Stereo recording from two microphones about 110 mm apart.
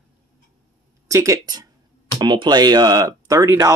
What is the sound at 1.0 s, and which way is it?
Speech, 30° right (ahead or behind).